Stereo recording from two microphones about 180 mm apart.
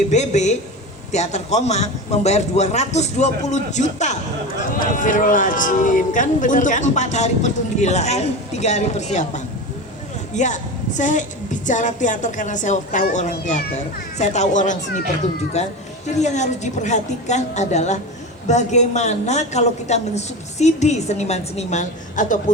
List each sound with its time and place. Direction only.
0.1 s a woman's voice: 40° left (ahead or behind)